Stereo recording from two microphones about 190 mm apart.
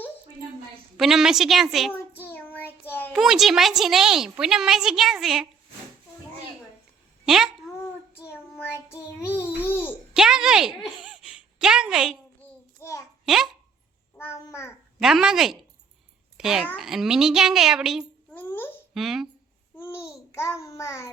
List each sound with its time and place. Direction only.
0.9 s a woman's voice: centre (ahead or behind)
1.9 s child singing: 10° left (ahead or behind)
3.1 s a woman's voice: centre (ahead or behind)
7.3 s a woman's voice: 5° right (ahead or behind)
8.3 s child singing: 10° left (ahead or behind)
9.2 s babbling: 10° left (ahead or behind)
10.2 s a sound: 5° right (ahead or behind)
12.8 s a sound: 15° left (ahead or behind)
13.2 s a child's voice: centre (ahead or behind)
14.2 s a child's voice: 15° left (ahead or behind)
14.9 s a woman's voice: centre (ahead or behind)
18.3 s babbling: 10° left (ahead or behind)
18.9 s a woman's voice: centre (ahead or behind)
19.7 s child singing: 15° left (ahead or behind)